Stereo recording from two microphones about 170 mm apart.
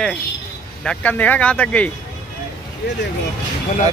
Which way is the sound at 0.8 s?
10° left (ahead or behind).